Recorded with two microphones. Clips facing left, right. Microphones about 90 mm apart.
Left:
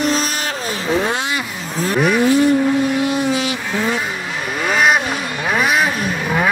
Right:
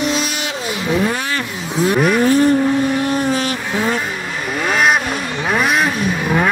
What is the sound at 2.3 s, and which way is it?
Vehicle, 45° right (ahead or behind).